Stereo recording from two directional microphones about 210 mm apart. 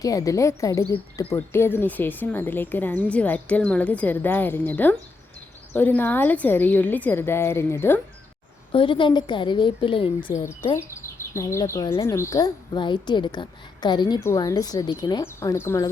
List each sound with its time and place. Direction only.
0.0 s speech: 15° left (ahead or behind)
8.7 s a woman's voice: 25° left (ahead or behind)